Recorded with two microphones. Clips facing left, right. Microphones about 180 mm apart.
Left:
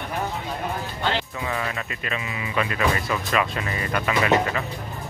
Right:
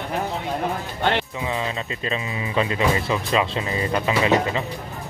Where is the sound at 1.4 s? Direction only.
20° right (ahead or behind).